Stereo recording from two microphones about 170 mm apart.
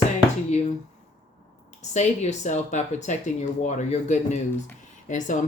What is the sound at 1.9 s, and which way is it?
Speech, 45° left (ahead or behind).